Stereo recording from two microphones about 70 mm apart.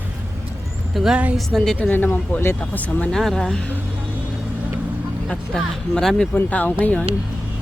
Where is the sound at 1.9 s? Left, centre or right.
Left.